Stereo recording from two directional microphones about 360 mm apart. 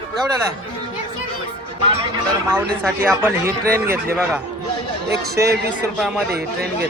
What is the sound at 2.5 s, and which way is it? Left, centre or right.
Speech, centre.